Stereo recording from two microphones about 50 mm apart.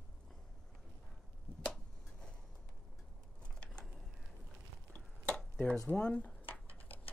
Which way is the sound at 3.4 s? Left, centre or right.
Left.